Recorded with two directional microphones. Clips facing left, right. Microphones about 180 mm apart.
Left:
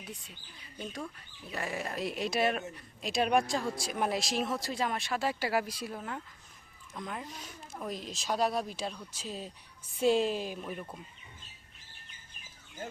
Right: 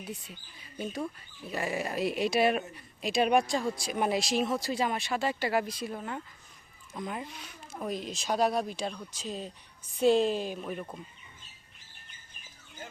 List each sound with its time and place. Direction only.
0.0 s speech: centre (ahead or behind)
1.5 s speech: centre (ahead or behind)
7.3 s speech: 40° left (ahead or behind)
7.7 s speech: centre (ahead or behind)